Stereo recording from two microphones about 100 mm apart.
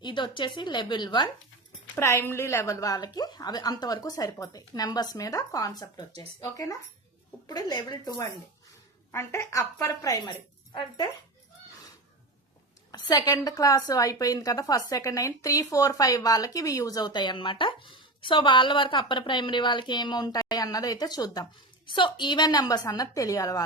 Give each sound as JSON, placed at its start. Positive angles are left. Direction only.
{"t": 0.0, "sound": "speech", "side_deg": 50}
{"t": 2.0, "sound": "a woman's voice", "side_deg": 25}
{"t": 9.1, "sound": "a woman's voice", "side_deg": 30}
{"t": 12.9, "sound": "a woman's voice", "side_deg": 40}
{"t": 21.8, "sound": "a woman's voice", "side_deg": 50}